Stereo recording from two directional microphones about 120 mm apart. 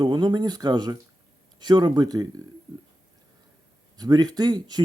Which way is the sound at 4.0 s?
35° right (ahead or behind).